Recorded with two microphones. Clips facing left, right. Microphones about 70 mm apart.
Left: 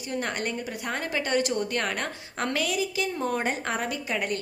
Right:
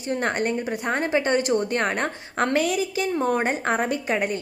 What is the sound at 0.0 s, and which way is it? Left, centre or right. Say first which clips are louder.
A woman's voice: right 6 dB; right.